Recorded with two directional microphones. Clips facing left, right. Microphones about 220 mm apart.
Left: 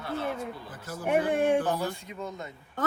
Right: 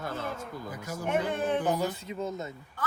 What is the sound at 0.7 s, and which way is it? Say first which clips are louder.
Speech: left 3 dB; 10° right (ahead or behind).